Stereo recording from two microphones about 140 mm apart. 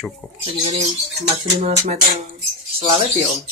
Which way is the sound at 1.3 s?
50° right (ahead or behind).